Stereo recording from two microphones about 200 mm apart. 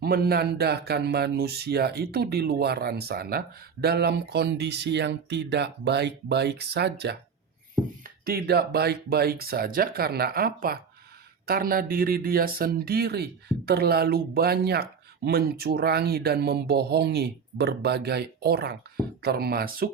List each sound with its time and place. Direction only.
0.0 s speech: 50° right (ahead or behind)
8.2 s speech: 50° right (ahead or behind)